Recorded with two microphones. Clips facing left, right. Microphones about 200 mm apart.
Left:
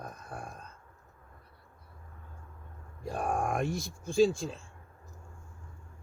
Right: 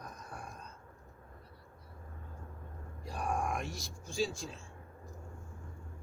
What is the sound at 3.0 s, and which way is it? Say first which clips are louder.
Groan: left 4 dB; 50° left (ahead or behind).